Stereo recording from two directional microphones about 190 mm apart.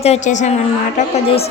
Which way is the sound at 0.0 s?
35° left (ahead or behind).